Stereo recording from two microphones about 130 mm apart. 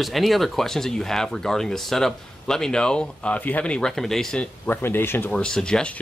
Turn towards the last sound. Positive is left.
turn(degrees=5)  # may be behind; listen again after turning